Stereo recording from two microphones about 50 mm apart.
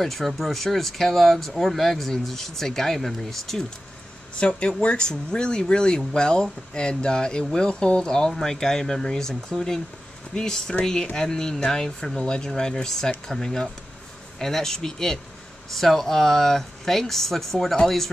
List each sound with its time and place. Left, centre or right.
0.0 s speech: centre
4.4 s speech: left; by 18.1 s centre